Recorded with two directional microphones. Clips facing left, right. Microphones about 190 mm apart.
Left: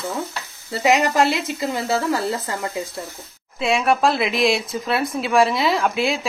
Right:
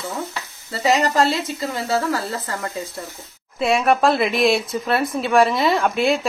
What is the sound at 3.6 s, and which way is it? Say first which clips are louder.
Speech: right 2 dB; centre (ahead or behind).